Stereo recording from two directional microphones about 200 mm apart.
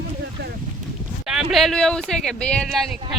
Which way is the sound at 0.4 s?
55° right (ahead or behind).